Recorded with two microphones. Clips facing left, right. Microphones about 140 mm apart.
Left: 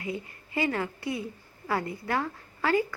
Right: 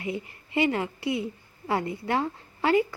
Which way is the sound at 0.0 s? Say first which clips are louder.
Right 2 dB; 25° right (ahead or behind).